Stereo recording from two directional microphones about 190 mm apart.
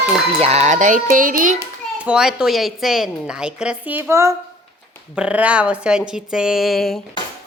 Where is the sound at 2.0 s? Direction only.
5° right (ahead or behind).